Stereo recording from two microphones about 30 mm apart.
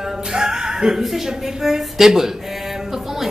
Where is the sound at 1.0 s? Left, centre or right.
Centre.